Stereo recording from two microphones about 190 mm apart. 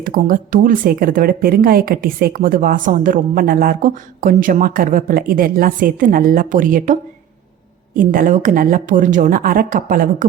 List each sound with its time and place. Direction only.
0.0 s speech: 45° right (ahead or behind)